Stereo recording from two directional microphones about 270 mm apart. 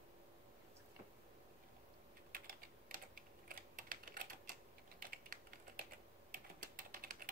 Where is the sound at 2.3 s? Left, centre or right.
Right.